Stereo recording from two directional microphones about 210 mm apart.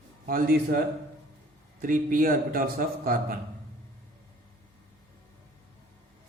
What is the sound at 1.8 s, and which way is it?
A man's voice, 40° right (ahead or behind).